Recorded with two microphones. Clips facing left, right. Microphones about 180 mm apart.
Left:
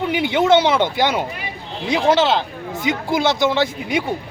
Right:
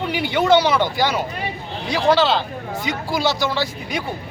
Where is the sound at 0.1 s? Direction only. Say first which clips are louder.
Left 1 dB; 20° left (ahead or behind).